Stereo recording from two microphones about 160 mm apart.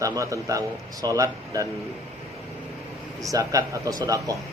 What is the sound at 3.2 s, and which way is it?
Speech, 20° right (ahead or behind).